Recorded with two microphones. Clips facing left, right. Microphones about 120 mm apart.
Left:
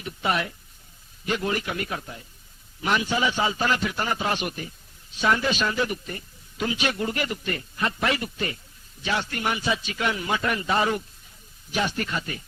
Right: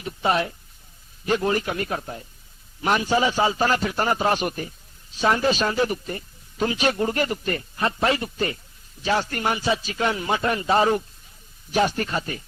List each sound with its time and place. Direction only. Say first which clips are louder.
0.0 s speech: right 4 dB; 30° right (ahead or behind)